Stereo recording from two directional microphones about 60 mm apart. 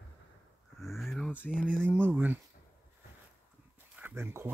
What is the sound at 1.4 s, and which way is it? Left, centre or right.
Speech, left.